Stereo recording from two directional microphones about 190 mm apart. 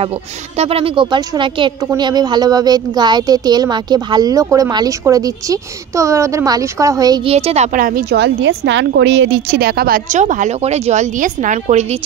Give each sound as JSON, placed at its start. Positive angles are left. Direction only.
{"t": 0.0, "sound": "speech", "side_deg": -30}
{"t": 7.3, "sound": "a woman's voice", "side_deg": -35}